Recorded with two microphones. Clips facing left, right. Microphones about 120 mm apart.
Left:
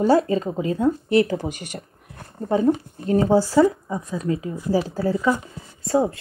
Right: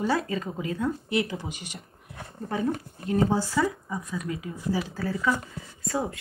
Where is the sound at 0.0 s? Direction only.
30° left (ahead or behind).